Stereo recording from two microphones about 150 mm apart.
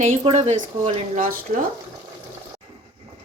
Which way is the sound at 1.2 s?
70° right (ahead or behind).